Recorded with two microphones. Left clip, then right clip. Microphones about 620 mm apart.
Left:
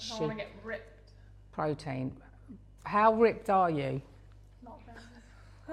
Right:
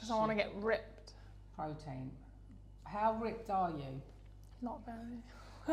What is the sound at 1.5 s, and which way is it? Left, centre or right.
Speech, left.